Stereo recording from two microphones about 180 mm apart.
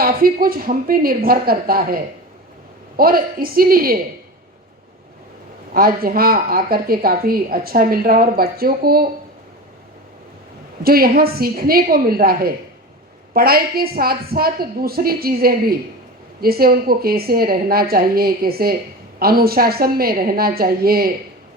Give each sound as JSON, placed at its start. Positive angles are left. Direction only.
{"t": 0.0, "sound": "speech", "side_deg": -55}
{"t": 3.0, "sound": "speech", "side_deg": -55}
{"t": 5.7, "sound": "speech", "side_deg": -55}
{"t": 10.8, "sound": "speech", "side_deg": -55}